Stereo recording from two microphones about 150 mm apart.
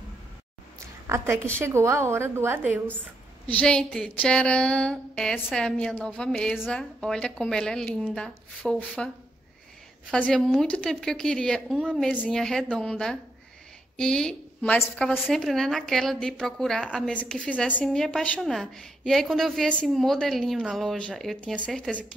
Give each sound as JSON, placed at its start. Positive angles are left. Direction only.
{"t": 1.0, "sound": "a woman's voice", "side_deg": -15}
{"t": 3.4, "sound": "a woman's voice", "side_deg": 10}
{"t": 10.1, "sound": "a woman's voice", "side_deg": 5}